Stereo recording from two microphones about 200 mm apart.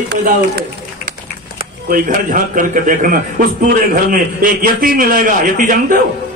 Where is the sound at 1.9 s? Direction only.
40° right (ahead or behind).